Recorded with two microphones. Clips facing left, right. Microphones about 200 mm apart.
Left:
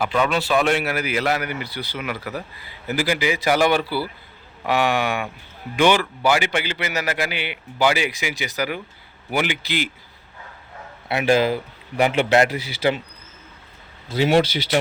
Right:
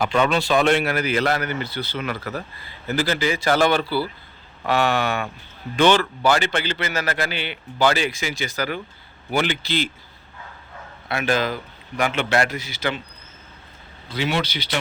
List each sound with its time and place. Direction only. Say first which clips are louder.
0.0 s speech: right 1 dB; 5° left (ahead or behind)
11.1 s speech: left 4 dB; 20° left (ahead or behind)
14.1 s speech: left 7 dB; 40° left (ahead or behind)